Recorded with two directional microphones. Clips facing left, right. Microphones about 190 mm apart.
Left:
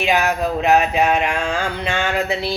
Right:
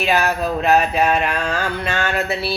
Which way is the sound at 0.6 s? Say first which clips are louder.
Even; 15° left (ahead or behind).